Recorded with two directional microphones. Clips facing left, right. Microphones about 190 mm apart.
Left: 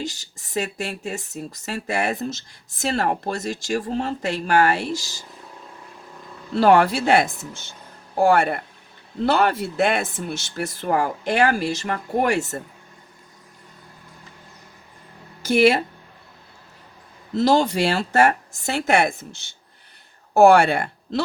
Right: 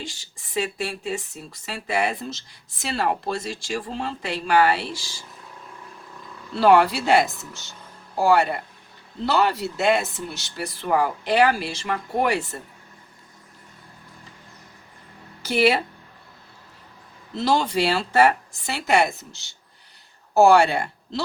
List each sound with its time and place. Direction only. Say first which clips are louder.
0.0 s speech: left 6 dB; 40° left (ahead or behind)
6.6 s speech: left 1 dB; 50° left (ahead or behind)
15.4 s speech: left 3 dB; 45° left (ahead or behind)
17.3 s speech: left 4 dB; 45° left (ahead or behind)